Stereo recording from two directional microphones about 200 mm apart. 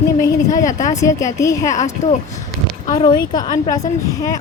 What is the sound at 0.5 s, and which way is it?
Speech, 35° left (ahead or behind).